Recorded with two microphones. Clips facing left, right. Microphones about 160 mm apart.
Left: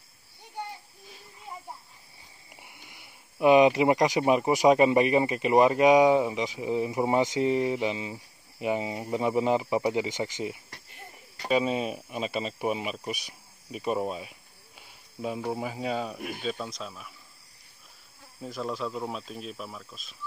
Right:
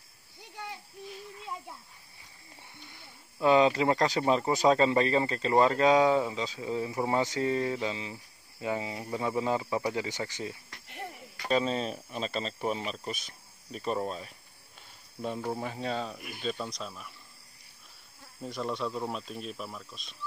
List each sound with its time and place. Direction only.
2.5 s speech: 15° left (ahead or behind)
18.4 s speech: centre (ahead or behind)